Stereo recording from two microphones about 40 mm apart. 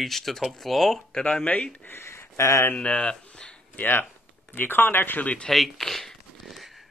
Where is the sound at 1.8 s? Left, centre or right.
Left.